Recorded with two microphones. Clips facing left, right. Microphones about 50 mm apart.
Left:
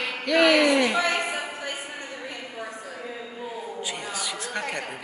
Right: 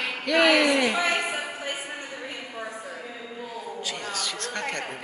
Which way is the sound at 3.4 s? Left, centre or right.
Centre.